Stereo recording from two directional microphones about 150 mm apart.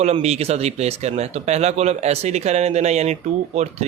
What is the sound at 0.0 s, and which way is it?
Speech, 45° right (ahead or behind).